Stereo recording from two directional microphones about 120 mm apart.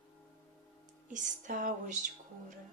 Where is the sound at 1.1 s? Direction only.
90° right.